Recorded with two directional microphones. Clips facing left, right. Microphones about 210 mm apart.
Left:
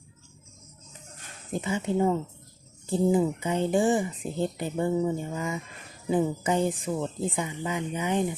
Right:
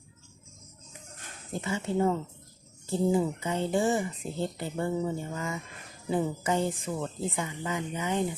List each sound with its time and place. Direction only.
1.5 s speech: 15° left (ahead or behind)